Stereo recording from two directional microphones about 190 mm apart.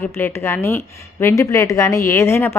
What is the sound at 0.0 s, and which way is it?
A woman's voice, 10° left (ahead or behind).